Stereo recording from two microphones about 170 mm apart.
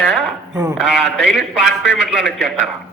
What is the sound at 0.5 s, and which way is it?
Speech, 15° right (ahead or behind).